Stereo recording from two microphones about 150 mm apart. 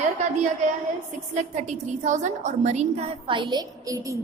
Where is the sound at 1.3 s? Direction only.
50° right (ahead or behind); by 4.2 s 20° right (ahead or behind).